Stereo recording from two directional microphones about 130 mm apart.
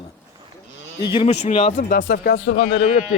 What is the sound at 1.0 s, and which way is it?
Speech, 40° left (ahead or behind).